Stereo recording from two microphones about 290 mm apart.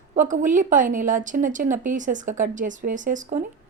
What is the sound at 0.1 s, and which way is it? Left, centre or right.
A woman's voice, right.